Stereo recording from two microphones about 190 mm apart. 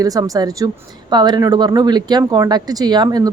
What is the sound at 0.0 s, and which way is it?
Speech, 20° right (ahead or behind).